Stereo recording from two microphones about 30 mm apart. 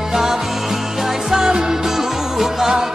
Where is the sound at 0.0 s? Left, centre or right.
Centre.